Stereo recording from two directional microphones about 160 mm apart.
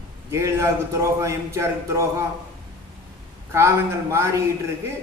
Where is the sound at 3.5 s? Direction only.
15° right (ahead or behind).